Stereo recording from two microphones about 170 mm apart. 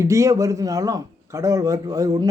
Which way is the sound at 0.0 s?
20° right (ahead or behind).